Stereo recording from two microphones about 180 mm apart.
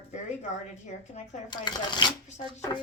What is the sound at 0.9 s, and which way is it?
Speech, 40° left (ahead or behind).